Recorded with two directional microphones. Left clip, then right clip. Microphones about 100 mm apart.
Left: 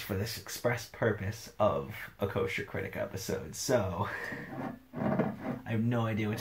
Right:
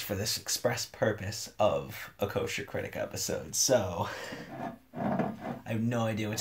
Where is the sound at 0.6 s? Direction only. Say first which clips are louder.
Even; 40° right (ahead or behind).